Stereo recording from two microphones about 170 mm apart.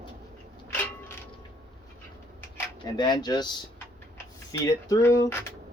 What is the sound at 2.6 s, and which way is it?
Speech, 25° left (ahead or behind).